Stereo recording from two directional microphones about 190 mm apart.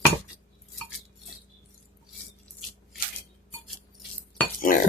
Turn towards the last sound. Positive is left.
turn(degrees=45)  # may be behind; listen again after turning